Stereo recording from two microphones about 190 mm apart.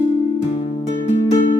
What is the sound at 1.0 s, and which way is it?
Music, 40° left (ahead or behind).